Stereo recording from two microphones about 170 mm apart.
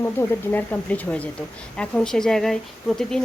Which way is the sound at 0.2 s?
10° left (ahead or behind).